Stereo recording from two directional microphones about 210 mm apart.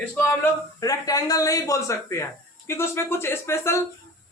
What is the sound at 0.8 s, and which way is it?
A man's voice, 15° left (ahead or behind).